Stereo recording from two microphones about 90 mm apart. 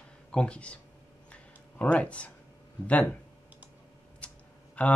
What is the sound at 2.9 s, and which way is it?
Speech, 15° left (ahead or behind).